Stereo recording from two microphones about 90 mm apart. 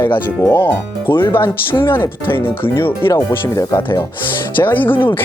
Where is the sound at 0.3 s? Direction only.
30° left (ahead or behind).